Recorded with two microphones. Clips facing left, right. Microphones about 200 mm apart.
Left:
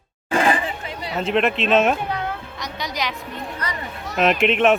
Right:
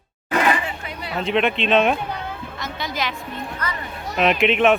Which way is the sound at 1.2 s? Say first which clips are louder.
Even; centre (ahead or behind).